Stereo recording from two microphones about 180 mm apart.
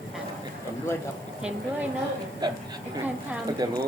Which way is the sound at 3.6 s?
20° right (ahead or behind).